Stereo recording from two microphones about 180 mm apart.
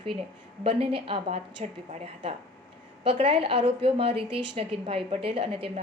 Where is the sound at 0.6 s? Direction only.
30° right (ahead or behind).